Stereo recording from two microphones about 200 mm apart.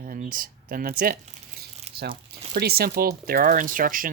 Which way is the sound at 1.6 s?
50° right (ahead or behind).